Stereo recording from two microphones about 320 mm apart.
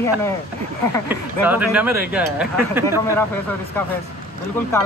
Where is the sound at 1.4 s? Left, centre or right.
Centre.